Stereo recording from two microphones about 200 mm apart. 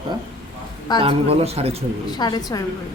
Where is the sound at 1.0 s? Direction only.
30° right (ahead or behind).